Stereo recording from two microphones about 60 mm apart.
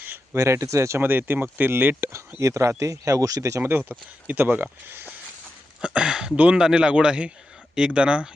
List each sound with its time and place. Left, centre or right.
0.3 s speech: right
1.0 s speech: right
2.1 s speech: right
3.6 s speech: right
5.8 s a man's voice: centre